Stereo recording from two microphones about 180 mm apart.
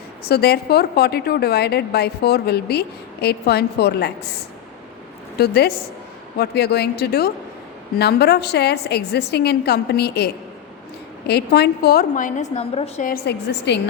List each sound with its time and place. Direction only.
0.3 s a woman's voice: 60° left (ahead or behind)
5.4 s a woman's voice: 60° left (ahead or behind); by 13.1 s 35° left (ahead or behind)
13.1 s a woman's voice: 60° left (ahead or behind)